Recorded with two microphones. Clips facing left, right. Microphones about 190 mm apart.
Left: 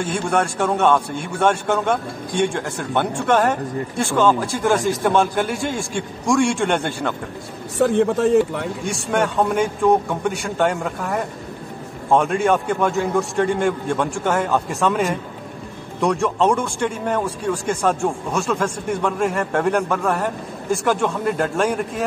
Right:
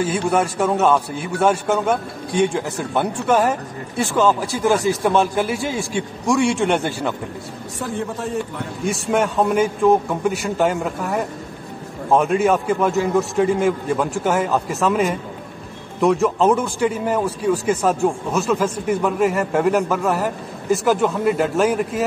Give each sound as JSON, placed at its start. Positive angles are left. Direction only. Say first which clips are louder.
{"t": 0.0, "sound": "speech", "louder": "right 2 dB", "side_deg": -5}
{"t": 7.8, "sound": "a man's voice", "louder": "left 10 dB", "side_deg": 75}
{"t": 8.8, "sound": "speech", "louder": "right 3 dB", "side_deg": 0}